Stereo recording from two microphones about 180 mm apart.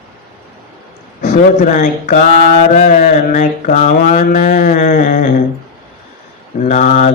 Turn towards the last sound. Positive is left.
turn(degrees=45)  # may be behind; listen again after turning